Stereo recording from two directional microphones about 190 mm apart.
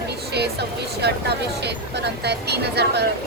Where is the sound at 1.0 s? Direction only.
60° right (ahead or behind).